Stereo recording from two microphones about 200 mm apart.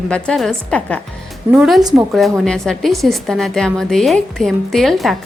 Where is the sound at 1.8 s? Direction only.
20° right (ahead or behind).